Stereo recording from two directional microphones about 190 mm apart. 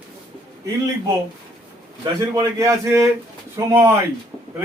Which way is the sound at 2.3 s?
15° right (ahead or behind).